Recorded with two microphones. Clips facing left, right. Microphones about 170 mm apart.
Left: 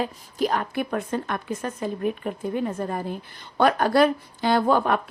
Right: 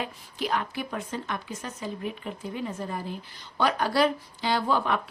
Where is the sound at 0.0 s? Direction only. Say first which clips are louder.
Left 7 dB; 45° left (ahead or behind).